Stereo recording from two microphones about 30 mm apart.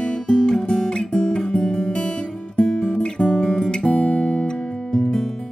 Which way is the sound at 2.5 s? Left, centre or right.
Left.